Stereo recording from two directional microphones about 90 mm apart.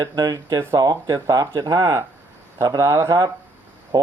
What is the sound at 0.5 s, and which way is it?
Speech, 30° right (ahead or behind).